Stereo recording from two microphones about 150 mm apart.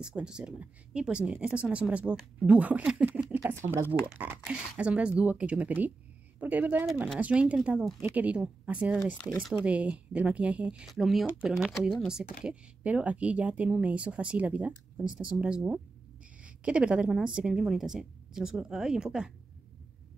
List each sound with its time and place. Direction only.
0.0 s speech: 5° right (ahead or behind)
9.1 s speech: 5° left (ahead or behind)